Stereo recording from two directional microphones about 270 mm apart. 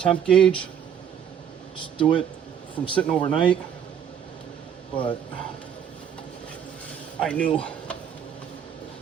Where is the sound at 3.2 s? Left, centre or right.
Centre.